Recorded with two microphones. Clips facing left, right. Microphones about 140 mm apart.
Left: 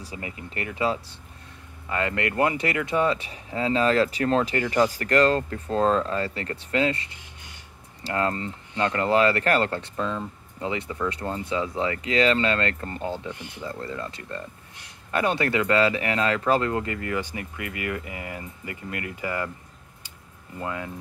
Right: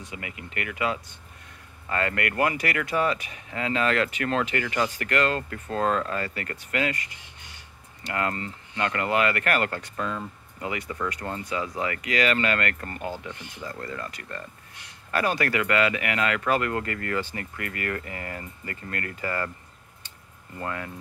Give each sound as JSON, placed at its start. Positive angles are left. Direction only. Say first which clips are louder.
{"t": 0.0, "sound": "speech", "louder": "left 2 dB", "side_deg": 35}
{"t": 1.9, "sound": "speech", "louder": "left 1 dB", "side_deg": 20}
{"t": 20.5, "sound": "speech", "louder": "left 1 dB", "side_deg": 15}